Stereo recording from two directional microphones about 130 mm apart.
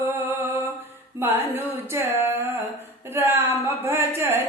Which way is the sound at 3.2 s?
15° right (ahead or behind).